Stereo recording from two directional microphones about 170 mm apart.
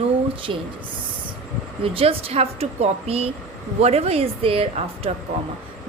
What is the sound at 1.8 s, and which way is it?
A woman's voice, 35° right (ahead or behind).